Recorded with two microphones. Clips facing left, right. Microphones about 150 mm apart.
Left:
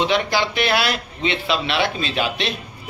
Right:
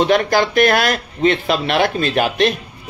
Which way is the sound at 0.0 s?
50° right (ahead or behind).